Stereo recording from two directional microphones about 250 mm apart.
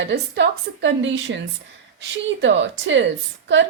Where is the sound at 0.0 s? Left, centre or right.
Right.